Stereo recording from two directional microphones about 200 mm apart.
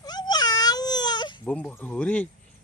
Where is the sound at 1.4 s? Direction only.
5° left (ahead or behind).